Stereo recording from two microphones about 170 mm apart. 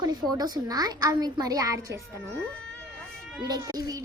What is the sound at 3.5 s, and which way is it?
Speech, 20° right (ahead or behind).